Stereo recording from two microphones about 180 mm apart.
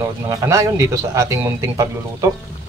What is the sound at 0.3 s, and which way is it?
A man's voice, 15° right (ahead or behind).